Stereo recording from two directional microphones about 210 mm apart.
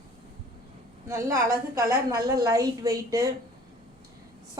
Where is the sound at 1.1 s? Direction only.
15° right (ahead or behind).